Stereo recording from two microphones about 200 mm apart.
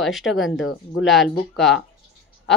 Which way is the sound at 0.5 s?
65° left (ahead or behind).